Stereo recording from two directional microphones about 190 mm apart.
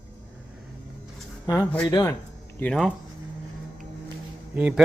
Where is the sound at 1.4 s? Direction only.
20° left (ahead or behind).